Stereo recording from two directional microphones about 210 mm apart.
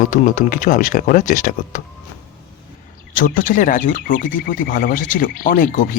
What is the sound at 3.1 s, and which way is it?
Speech, 40° left (ahead or behind).